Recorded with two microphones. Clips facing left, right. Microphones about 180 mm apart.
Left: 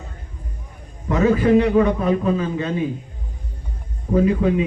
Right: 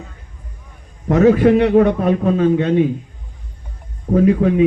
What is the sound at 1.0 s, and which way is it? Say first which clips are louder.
A man's voice: right 5 dB; 65° right (ahead or behind).